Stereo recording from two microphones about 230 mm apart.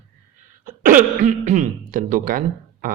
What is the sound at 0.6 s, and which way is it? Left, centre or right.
Speech, right.